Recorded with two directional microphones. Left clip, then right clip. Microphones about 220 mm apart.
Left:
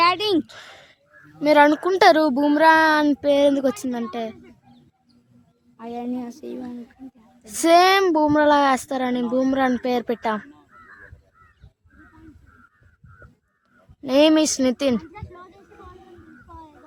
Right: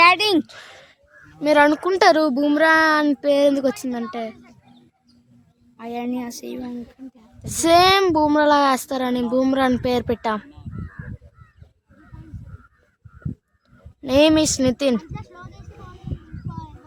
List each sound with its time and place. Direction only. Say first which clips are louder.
0.0 s a sound: right 4 dB; 35° right (ahead or behind)
0.4 s a sound: right 1 dB; centre (ahead or behind)
1.4 s speech: even; centre (ahead or behind)
5.7 s speech: right 2 dB; 35° right (ahead or behind)
6.6 s speech: right 3 dB; 45° right (ahead or behind)
7.4 s speech: even; 5° right (ahead or behind)
10.5 s crow: right 4 dB; 45° right (ahead or behind)
14.0 s speech: right 1 dB; 5° right (ahead or behind)
15.1 s a sound: right 1 dB; 45° right (ahead or behind)